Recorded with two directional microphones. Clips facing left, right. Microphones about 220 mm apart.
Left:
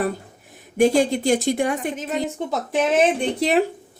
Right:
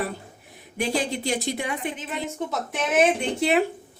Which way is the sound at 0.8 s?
45° left (ahead or behind).